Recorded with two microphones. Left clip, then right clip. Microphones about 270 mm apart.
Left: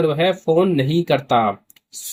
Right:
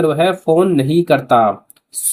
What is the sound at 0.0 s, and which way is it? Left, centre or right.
Speech, centre.